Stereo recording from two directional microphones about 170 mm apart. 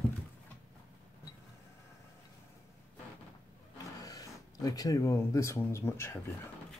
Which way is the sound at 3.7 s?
20° left (ahead or behind).